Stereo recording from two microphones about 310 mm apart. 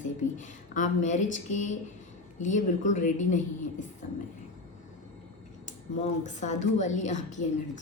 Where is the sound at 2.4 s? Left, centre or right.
Left.